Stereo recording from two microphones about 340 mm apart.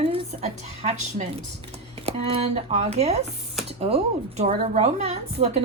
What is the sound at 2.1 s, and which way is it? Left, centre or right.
Speech, centre.